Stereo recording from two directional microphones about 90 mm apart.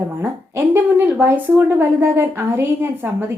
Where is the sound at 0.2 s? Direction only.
25° right (ahead or behind).